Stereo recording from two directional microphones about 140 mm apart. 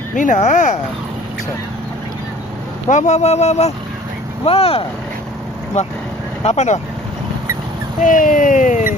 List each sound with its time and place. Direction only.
0.2 s speech: 60° left (ahead or behind)
2.9 s speech: 55° left (ahead or behind)
8.0 s speech: 75° left (ahead or behind)